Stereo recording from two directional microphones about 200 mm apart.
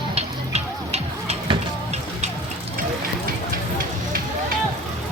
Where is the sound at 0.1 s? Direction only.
30° right (ahead or behind).